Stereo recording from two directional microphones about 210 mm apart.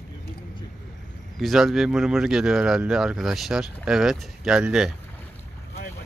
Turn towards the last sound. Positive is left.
turn(degrees=-5)  # may be behind; listen again after turning